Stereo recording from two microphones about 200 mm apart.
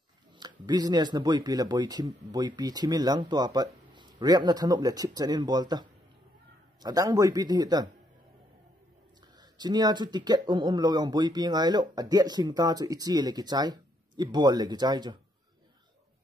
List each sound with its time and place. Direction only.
0.4 s speech: 20° right (ahead or behind)
9.4 s speech: 20° right (ahead or behind)